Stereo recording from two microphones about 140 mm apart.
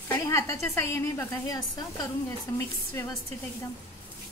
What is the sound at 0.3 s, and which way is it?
Speech, 20° left (ahead or behind).